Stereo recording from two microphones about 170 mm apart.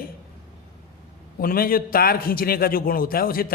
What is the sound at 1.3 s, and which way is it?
A man's voice, 60° left (ahead or behind).